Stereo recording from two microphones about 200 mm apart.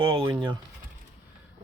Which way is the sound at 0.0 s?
25° right (ahead or behind).